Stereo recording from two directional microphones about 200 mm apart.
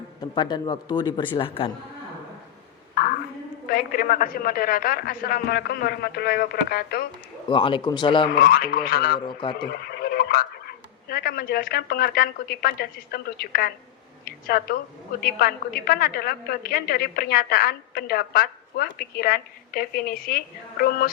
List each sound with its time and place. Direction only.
0.2 s a man's voice: 20° left (ahead or behind)
3.7 s a woman's voice: 45° left (ahead or behind)
7.4 s a man's voice: 25° left (ahead or behind)
8.3 s a woman's voice: 50° left (ahead or behind)
9.2 s a man's voice: 25° left (ahead or behind)
9.9 s a woman's voice: 55° left (ahead or behind)